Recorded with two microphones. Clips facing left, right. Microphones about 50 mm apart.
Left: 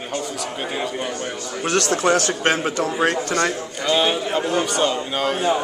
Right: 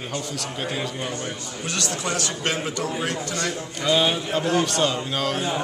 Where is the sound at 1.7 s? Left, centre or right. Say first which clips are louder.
Left 9 dB; left.